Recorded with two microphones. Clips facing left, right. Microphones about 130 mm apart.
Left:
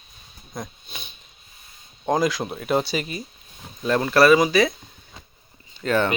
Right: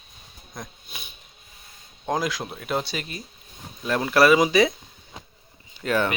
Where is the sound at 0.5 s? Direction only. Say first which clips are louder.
Left 4 dB; 5° right (ahead or behind).